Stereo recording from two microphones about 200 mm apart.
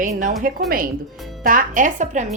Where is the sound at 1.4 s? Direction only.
40° right (ahead or behind).